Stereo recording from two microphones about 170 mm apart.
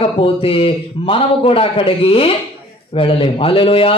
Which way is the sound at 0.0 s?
35° left (ahead or behind).